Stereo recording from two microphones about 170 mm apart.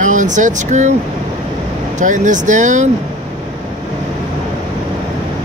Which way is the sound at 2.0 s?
45° right (ahead or behind).